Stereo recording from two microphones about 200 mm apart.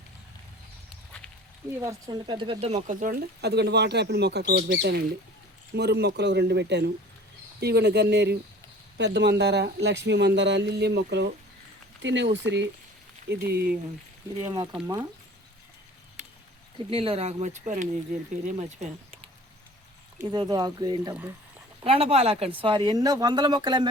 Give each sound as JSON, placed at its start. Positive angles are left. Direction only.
{"t": 1.8, "sound": "speech", "side_deg": -20}
{"t": 13.2, "sound": "speech", "side_deg": -50}
{"t": 14.4, "sound": "speech", "side_deg": -20}
{"t": 16.9, "sound": "speech", "side_deg": -30}
{"t": 20.2, "sound": "speech", "side_deg": -20}